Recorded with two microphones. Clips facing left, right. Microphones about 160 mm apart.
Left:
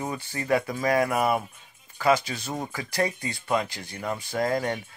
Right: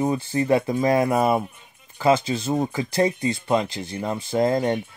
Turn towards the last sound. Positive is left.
turn(degrees=-25)  # may be behind; listen again after turning